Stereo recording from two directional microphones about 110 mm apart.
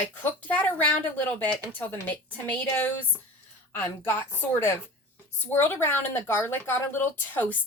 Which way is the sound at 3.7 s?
20° left (ahead or behind).